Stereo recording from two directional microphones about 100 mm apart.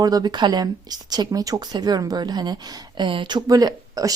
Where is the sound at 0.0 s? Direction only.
40° right (ahead or behind).